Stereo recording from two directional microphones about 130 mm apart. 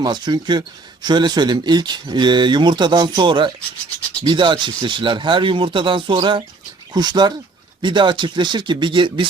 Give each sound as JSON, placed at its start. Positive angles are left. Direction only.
{"t": 0.0, "sound": "speech", "side_deg": -35}